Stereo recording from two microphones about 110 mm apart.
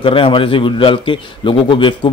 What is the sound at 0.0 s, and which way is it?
A man's voice, 55° left (ahead or behind).